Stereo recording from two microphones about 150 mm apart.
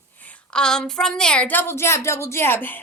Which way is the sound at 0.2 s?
10° left (ahead or behind).